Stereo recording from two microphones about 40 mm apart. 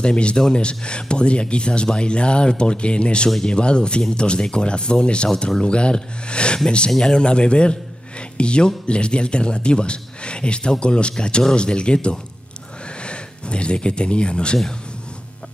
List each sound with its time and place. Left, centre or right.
0.0 s speech: left